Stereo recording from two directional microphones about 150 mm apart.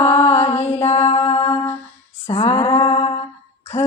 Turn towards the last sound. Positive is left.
turn(degrees=35)  # may be behind; listen again after turning